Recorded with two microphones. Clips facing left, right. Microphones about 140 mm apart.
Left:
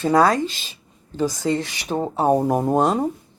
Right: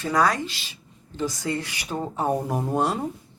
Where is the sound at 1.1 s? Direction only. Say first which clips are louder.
Left 6 dB; 45° left (ahead or behind).